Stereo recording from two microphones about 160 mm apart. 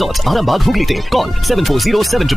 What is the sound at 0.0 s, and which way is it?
Speech, centre (ahead or behind).